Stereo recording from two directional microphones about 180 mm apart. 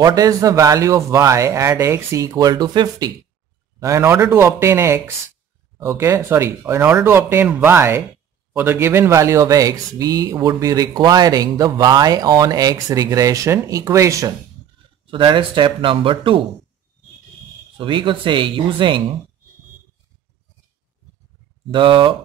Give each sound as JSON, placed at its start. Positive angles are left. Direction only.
{"t": 0.0, "sound": "speech", "side_deg": -20}
{"t": 15.0, "sound": "speech", "side_deg": -25}
{"t": 17.7, "sound": "speech", "side_deg": -25}
{"t": 21.6, "sound": "speech", "side_deg": -30}